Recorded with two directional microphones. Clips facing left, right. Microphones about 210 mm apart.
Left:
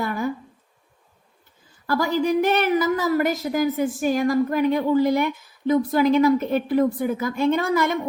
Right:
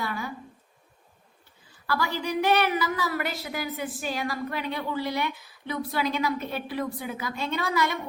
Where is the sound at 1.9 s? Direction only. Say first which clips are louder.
Left 8 dB; 45° left (ahead or behind).